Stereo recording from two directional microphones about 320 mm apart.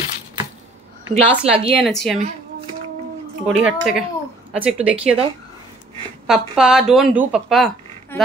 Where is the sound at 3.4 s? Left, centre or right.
Centre.